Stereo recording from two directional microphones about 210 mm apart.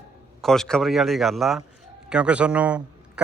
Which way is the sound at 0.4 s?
Centre (ahead or behind).